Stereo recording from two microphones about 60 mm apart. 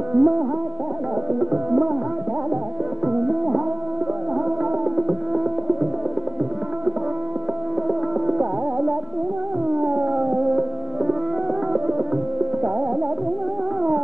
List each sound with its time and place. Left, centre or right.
0.1 s music: centre
3.1 s music: centre
4.9 s music: centre
8.3 s music: centre